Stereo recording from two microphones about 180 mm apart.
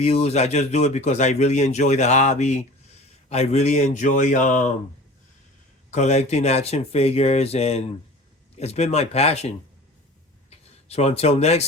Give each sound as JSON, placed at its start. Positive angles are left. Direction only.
{"t": 0.0, "sound": "a man's voice", "side_deg": 35}
{"t": 5.9, "sound": "speech", "side_deg": 40}
{"t": 10.5, "sound": "speech", "side_deg": 35}